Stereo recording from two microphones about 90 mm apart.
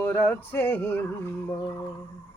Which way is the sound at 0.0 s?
25° left (ahead or behind).